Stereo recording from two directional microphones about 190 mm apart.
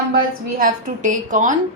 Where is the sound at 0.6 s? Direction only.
45° right (ahead or behind).